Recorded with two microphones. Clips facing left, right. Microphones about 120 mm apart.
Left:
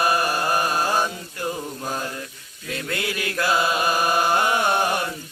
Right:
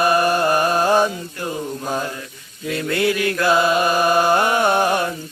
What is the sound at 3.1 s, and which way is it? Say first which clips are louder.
Mantra: right 6 dB; 20° left (ahead or behind).